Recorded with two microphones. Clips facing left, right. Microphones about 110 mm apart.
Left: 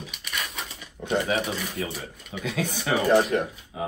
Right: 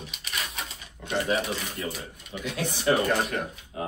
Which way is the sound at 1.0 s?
30° left (ahead or behind).